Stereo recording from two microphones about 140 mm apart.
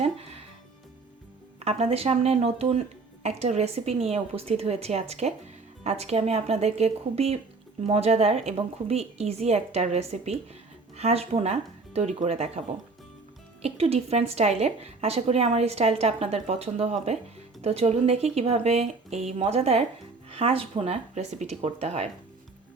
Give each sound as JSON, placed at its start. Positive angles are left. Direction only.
{"t": 0.0, "sound": "music", "side_deg": -45}
{"t": 1.5, "sound": "a woman's voice", "side_deg": -45}